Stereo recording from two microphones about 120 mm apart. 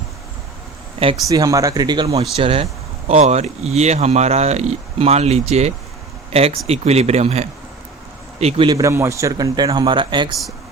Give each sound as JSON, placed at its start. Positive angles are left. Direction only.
{"t": 1.3, "sound": "speech", "side_deg": -30}
{"t": 2.3, "sound": "speech", "side_deg": -50}
{"t": 3.1, "sound": "speech", "side_deg": -70}
{"t": 8.6, "sound": "speech", "side_deg": -30}